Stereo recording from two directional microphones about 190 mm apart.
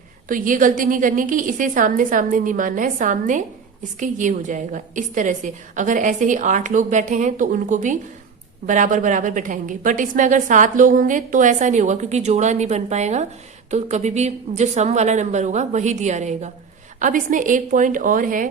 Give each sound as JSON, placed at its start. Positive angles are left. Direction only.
{"t": 0.3, "sound": "a woman's voice", "side_deg": -45}